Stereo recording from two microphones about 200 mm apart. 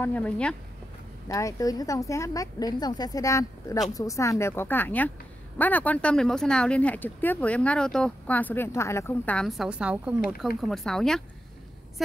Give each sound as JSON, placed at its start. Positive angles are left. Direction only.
{"t": 0.0, "sound": "speech", "side_deg": 5}
{"t": 1.3, "sound": "speech", "side_deg": 15}